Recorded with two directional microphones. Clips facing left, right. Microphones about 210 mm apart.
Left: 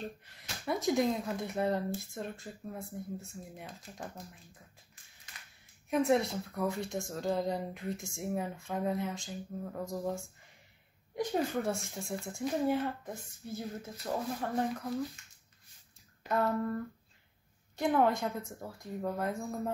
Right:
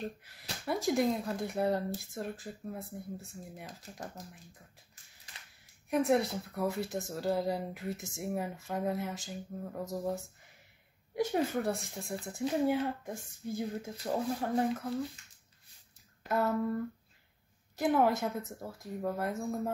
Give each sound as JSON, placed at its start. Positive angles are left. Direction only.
{"t": 0.0, "sound": "a woman's voice", "side_deg": -5}
{"t": 5.9, "sound": "a woman's voice", "side_deg": 0}
{"t": 12.6, "sound": "speech", "side_deg": -10}
{"t": 14.6, "sound": "a woman's voice", "side_deg": 0}
{"t": 16.3, "sound": "a woman's voice", "side_deg": 0}